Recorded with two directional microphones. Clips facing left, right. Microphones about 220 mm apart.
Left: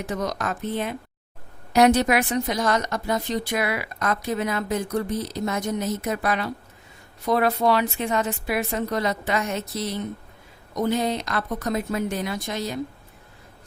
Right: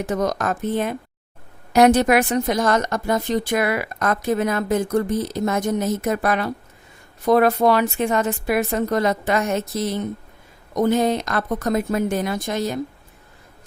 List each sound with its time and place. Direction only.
0.0 s a woman's voice: 45° right (ahead or behind)